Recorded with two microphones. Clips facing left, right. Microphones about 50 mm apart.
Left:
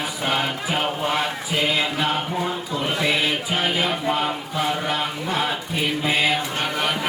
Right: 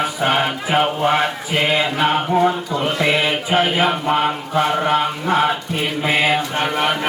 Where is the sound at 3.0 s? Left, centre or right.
Right.